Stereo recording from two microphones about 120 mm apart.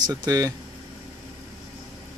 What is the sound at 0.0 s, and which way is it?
Speech, 35° right (ahead or behind).